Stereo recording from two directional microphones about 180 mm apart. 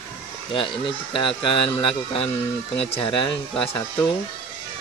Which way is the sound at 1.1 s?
30° left (ahead or behind).